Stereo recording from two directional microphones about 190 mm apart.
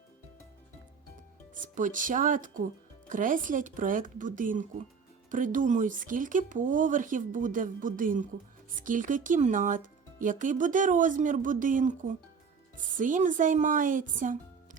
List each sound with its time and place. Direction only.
1.6 s speech: 45° right (ahead or behind)